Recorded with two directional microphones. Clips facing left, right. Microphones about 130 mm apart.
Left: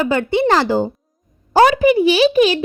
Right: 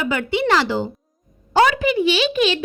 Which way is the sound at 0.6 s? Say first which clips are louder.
Left 5 dB; 45° left (ahead or behind).